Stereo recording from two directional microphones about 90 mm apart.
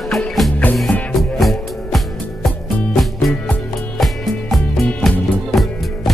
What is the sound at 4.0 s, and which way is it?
Music, centre (ahead or behind).